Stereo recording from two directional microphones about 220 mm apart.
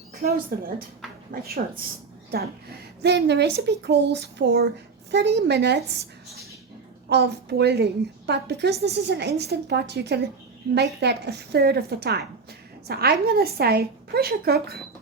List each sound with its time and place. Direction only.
0.2 s a woman's voice: 45° right (ahead or behind)
7.1 s a woman's voice: 50° right (ahead or behind)